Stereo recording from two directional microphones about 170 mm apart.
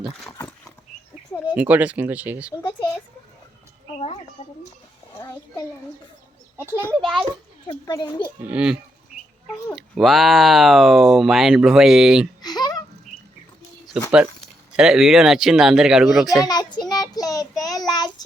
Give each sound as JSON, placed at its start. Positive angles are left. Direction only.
{"t": 0.0, "sound": "speech", "side_deg": 0}
{"t": 1.5, "sound": "speech", "side_deg": -10}
{"t": 2.6, "sound": "a sound", "side_deg": 20}
{"t": 3.9, "sound": "a sound", "side_deg": 35}
{"t": 7.7, "sound": "a child's voice", "side_deg": 25}
{"t": 8.4, "sound": "speech", "side_deg": -10}
{"t": 12.4, "sound": "a sound", "side_deg": 25}
{"t": 14.0, "sound": "speech", "side_deg": -5}
{"t": 16.5, "sound": "child singing", "side_deg": 25}